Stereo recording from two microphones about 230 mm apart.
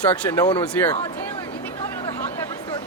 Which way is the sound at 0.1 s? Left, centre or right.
Centre.